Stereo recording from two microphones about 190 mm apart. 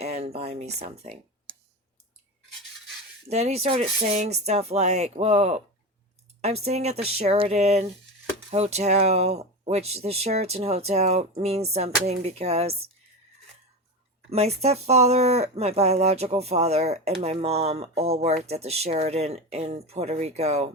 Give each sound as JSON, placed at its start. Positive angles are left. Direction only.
{"t": 0.0, "sound": "a sound", "side_deg": -35}
{"t": 0.8, "sound": "speech", "side_deg": -30}
{"t": 3.2, "sound": "speech", "side_deg": -35}
{"t": 14.3, "sound": "speech", "side_deg": -35}